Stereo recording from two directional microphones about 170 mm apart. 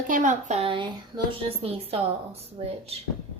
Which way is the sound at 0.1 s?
45° right (ahead or behind).